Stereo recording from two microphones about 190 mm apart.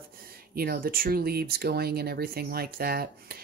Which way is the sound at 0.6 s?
50° right (ahead or behind).